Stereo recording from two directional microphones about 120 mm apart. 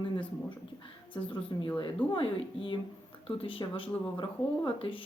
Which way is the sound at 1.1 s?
45° left (ahead or behind).